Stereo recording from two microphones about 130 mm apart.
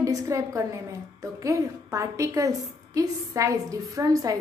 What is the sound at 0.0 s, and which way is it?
A woman's voice, 25° right (ahead or behind).